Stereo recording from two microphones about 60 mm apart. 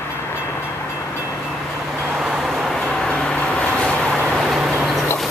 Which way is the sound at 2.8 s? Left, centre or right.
Centre.